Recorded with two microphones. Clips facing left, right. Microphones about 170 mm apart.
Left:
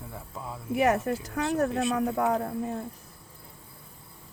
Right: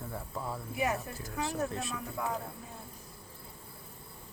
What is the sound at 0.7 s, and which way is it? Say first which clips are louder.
Speech: left 10 dB; 70° left (ahead or behind).